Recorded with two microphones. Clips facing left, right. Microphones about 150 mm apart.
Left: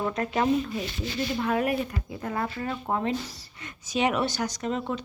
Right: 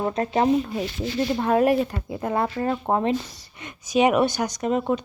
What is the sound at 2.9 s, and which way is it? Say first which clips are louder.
A woman's voice: right 3 dB; 20° right (ahead or behind).